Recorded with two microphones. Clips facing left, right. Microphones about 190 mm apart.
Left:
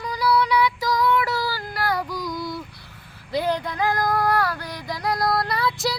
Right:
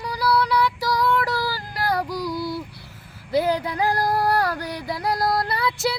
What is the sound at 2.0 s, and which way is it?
Child singing, 10° right (ahead or behind).